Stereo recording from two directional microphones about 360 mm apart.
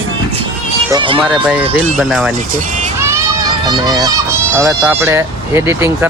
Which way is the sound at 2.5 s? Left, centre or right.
Right.